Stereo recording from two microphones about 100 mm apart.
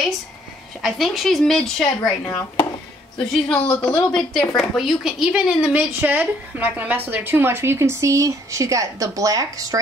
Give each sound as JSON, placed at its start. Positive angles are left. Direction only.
{"t": 0.8, "sound": "a woman's voice", "side_deg": 0}
{"t": 2.2, "sound": "speech", "side_deg": 25}
{"t": 3.4, "sound": "a woman's voice", "side_deg": 5}
{"t": 5.7, "sound": "a woman's voice", "side_deg": -15}